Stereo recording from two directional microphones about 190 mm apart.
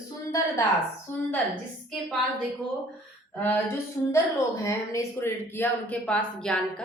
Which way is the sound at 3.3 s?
10° left (ahead or behind).